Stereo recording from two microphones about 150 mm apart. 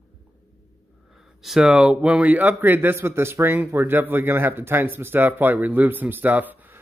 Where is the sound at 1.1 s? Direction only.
Centre (ahead or behind).